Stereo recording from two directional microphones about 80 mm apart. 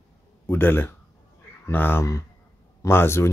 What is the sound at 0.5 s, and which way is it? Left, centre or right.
A man's voice, left.